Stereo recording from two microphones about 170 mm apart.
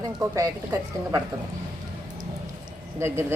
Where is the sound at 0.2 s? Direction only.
20° right (ahead or behind).